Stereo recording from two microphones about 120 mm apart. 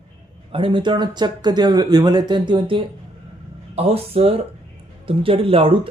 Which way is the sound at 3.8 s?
55° right (ahead or behind).